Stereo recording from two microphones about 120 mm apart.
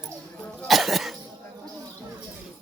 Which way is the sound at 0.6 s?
Centre (ahead or behind).